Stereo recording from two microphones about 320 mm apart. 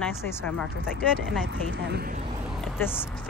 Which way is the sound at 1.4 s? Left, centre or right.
Right.